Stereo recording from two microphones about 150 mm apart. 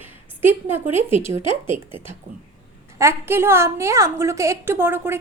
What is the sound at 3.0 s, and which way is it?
A woman's voice, 15° right (ahead or behind).